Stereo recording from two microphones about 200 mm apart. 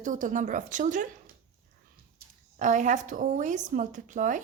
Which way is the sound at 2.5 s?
40° right (ahead or behind).